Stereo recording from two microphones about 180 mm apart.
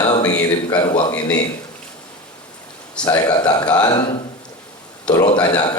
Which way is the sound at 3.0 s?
25° left (ahead or behind).